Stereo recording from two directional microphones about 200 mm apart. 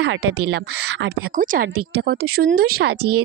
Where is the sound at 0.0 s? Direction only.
60° right (ahead or behind).